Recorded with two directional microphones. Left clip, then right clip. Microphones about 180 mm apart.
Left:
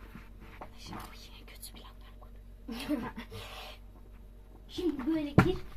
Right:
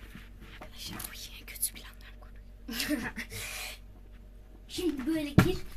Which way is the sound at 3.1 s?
55° right (ahead or behind).